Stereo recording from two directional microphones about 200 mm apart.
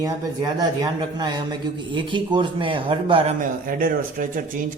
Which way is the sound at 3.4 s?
45° right (ahead or behind).